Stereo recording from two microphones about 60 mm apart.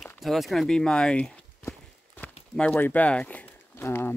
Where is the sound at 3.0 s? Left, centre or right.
Left.